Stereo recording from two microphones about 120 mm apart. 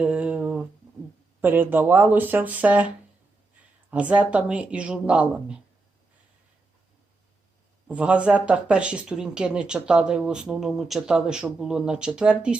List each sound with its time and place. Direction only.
0.0 s a sound: 10° right (ahead or behind)
1.4 s speech: 15° right (ahead or behind)
3.9 s speech: 10° right (ahead or behind)
7.9 s speech: 10° right (ahead or behind)